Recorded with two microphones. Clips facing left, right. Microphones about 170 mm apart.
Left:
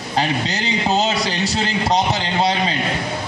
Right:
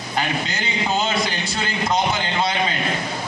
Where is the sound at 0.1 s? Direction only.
35° left (ahead or behind).